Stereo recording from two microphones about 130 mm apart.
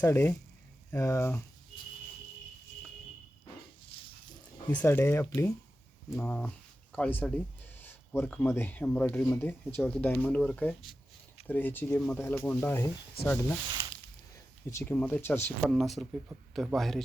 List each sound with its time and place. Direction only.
0.0 s speech: 20° left (ahead or behind)
3.9 s a sound: 45° left (ahead or behind)
4.7 s speech: 15° left (ahead or behind)
14.3 s a sound: 20° left (ahead or behind)
14.9 s speech: 15° left (ahead or behind)
15.7 s a man's voice: centre (ahead or behind)